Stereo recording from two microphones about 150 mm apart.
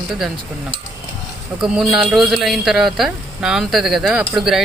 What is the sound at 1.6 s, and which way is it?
Speech, 5° right (ahead or behind).